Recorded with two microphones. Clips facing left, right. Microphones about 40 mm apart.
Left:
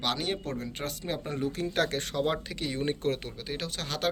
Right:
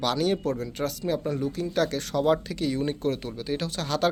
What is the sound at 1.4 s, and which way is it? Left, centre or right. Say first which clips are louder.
Speech: right 3 dB; left.